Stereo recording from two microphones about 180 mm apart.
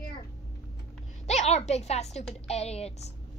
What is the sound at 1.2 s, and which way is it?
A woman's voice, 40° left (ahead or behind).